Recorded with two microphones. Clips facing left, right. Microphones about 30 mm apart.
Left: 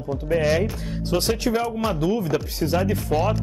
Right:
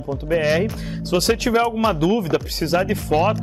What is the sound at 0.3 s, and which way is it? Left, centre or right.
Speech, centre.